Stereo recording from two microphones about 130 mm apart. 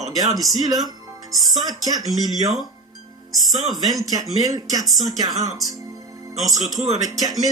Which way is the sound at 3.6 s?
Centre (ahead or behind).